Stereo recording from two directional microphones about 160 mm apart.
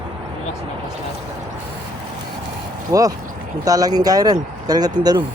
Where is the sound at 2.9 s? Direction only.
20° right (ahead or behind).